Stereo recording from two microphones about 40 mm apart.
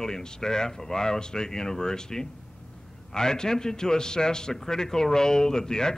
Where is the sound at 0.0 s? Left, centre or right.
Centre.